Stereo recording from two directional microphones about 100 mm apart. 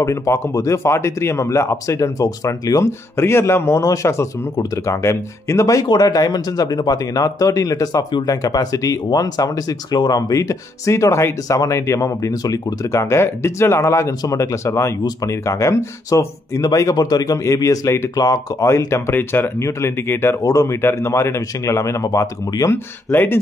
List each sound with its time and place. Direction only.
0.0 s speech: 30° left (ahead or behind)
13.0 s speech: 25° left (ahead or behind)
23.1 s speech: 20° left (ahead or behind)